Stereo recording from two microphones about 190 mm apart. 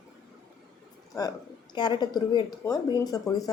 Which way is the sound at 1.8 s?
20° left (ahead or behind).